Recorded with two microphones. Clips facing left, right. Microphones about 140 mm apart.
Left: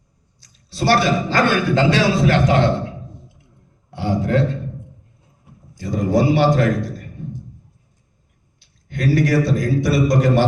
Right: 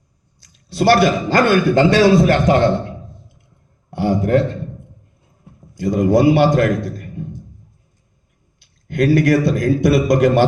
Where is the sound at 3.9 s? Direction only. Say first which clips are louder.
Right 4 dB; 50° right (ahead or behind).